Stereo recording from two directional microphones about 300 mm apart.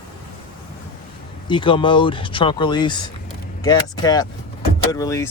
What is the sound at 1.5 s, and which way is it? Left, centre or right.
Speech, centre.